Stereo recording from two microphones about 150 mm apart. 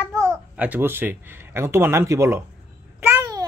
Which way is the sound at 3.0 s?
15° right (ahead or behind).